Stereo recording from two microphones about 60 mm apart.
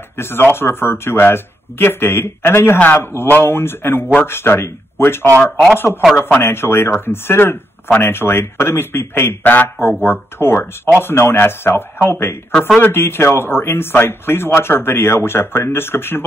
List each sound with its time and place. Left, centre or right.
0.2 s speech: left
6.1 s speech: left
6.4 s speech: left
10.4 s speech: left